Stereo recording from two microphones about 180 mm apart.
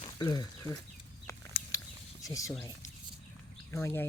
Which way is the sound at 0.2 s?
25° left (ahead or behind).